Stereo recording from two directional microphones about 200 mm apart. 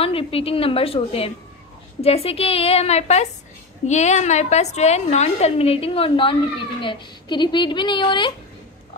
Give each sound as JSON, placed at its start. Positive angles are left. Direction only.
{"t": 0.0, "sound": "a woman's voice", "side_deg": 30}